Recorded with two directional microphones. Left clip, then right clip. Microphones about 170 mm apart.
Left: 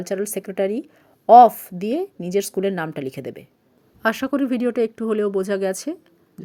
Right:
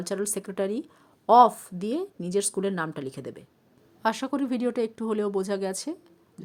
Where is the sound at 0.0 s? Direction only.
15° left (ahead or behind).